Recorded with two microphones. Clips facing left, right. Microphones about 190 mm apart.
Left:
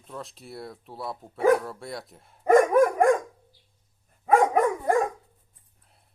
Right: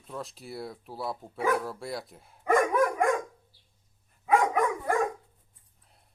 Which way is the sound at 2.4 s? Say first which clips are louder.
Left 6 dB; 40° left (ahead or behind).